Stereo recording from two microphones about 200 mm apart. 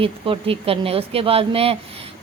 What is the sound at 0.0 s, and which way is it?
Speech, 25° right (ahead or behind).